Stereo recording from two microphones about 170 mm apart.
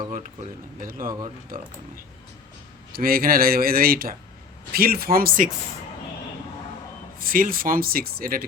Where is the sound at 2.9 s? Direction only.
60° right (ahead or behind).